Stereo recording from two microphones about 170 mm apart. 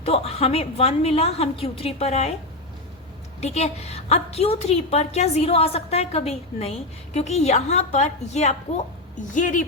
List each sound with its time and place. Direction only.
0.0 s a woman's voice: 35° left (ahead or behind)
3.4 s a woman's voice: 40° left (ahead or behind)